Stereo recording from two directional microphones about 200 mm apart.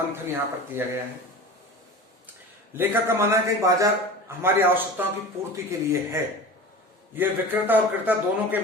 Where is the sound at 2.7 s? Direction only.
10° right (ahead or behind).